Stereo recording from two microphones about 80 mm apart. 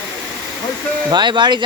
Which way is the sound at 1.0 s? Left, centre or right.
Right.